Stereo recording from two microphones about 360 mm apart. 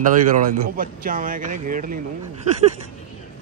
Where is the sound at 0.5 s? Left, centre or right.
Right.